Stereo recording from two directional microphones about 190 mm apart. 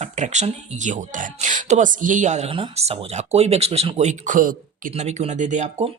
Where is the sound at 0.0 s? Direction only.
40° right (ahead or behind).